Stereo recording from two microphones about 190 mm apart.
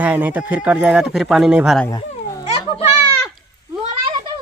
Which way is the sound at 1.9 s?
20° left (ahead or behind).